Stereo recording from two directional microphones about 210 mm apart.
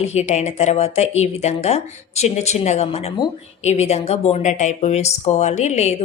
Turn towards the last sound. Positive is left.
turn(degrees=30)  # may be behind; listen again after turning